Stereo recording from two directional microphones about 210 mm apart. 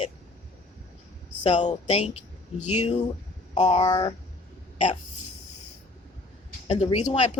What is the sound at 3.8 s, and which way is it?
Speech, 20° left (ahead or behind).